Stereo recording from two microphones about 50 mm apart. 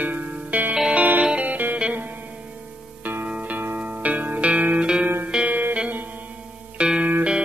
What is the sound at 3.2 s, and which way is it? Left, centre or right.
Music, right.